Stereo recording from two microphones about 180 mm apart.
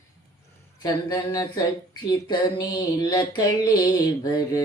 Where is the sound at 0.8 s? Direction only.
20° left (ahead or behind).